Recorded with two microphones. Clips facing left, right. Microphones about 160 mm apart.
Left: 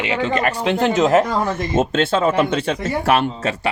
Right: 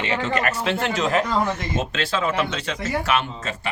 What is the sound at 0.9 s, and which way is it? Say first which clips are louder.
Speech: left 10 dB; 20° left (ahead or behind).